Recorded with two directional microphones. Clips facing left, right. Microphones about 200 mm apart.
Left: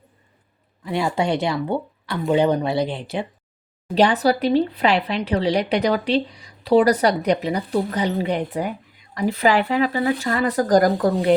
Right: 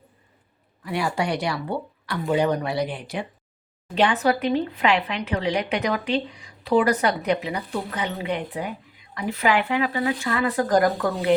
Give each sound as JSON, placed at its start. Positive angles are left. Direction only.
{"t": 0.9, "sound": "speech", "side_deg": 25}
{"t": 3.9, "sound": "speech", "side_deg": 35}